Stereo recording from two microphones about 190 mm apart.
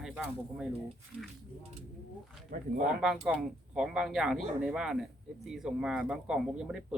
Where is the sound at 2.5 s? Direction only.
45° right (ahead or behind).